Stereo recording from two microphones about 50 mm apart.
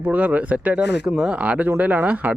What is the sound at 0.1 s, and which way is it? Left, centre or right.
Speech, right.